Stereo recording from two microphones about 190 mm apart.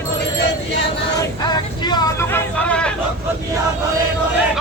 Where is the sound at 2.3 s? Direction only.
5° left (ahead or behind).